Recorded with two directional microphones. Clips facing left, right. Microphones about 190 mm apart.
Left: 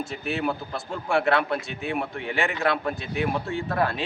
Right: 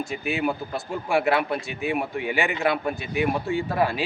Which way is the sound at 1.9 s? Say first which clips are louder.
Right 3 dB; 15° right (ahead or behind).